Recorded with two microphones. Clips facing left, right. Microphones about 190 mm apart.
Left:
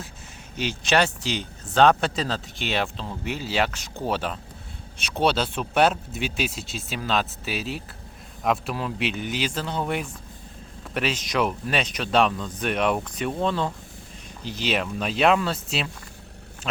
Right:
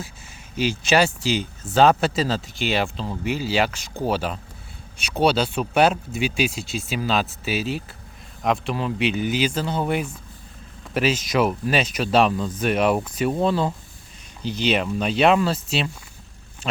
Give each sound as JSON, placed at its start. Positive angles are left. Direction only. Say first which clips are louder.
{"t": 0.5, "sound": "speech", "louder": "right 3 dB", "side_deg": 0}